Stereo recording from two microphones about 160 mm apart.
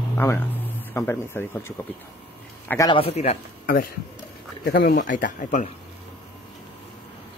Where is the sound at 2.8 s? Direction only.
35° left (ahead or behind).